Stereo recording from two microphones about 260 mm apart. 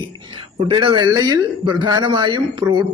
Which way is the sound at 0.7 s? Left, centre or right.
Centre.